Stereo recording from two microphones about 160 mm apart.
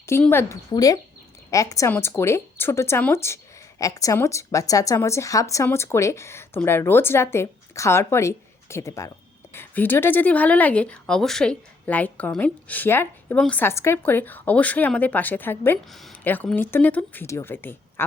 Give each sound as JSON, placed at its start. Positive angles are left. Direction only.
{"t": 0.2, "sound": "speech", "side_deg": 15}